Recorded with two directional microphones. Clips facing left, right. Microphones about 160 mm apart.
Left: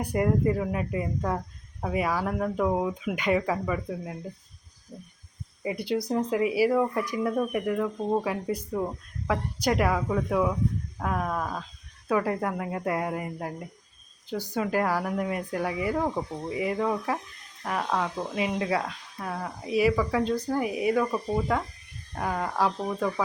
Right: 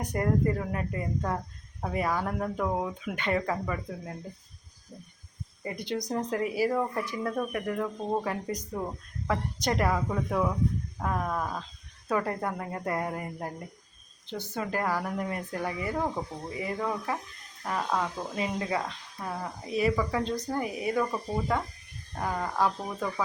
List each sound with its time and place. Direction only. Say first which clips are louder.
0.0 s speech: left 3 dB; 10° left (ahead or behind)
5.6 s speech: left 5 dB; 5° left (ahead or behind)
14.5 s speech: left 4 dB; 15° left (ahead or behind)